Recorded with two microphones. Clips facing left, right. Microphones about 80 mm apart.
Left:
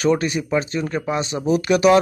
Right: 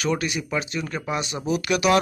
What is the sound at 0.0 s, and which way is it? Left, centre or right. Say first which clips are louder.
A man's voice: left 6 dB; left.